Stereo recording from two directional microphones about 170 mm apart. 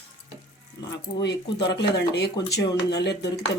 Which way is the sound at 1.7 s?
80° left.